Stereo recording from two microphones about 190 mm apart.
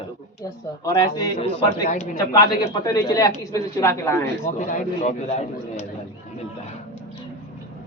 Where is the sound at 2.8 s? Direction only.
20° left (ahead or behind).